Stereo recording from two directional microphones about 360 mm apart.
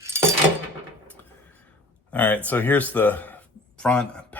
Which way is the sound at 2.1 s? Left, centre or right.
Centre.